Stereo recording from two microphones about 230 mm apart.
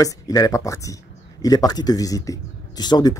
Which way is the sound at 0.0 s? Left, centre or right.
Centre.